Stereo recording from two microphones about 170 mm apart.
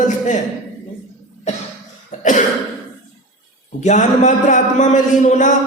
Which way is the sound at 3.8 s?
45° left (ahead or behind).